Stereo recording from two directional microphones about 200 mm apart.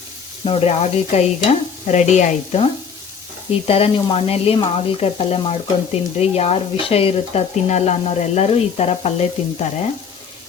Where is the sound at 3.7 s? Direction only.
30° left (ahead or behind).